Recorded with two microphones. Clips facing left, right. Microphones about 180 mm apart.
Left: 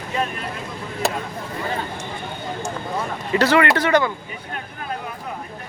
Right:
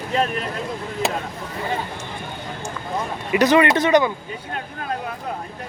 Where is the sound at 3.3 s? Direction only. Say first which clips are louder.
Right 2 dB; 20° right (ahead or behind).